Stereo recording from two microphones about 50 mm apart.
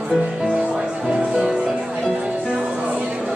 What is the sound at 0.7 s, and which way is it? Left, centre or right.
Music, centre.